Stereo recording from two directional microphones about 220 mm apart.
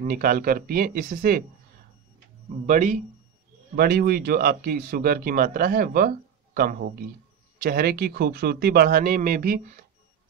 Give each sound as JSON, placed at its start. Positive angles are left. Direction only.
{"t": 0.0, "sound": "speech", "side_deg": -40}
{"t": 2.6, "sound": "speech", "side_deg": -35}